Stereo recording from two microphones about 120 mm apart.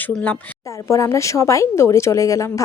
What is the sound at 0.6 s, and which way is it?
Speech, 25° left (ahead or behind).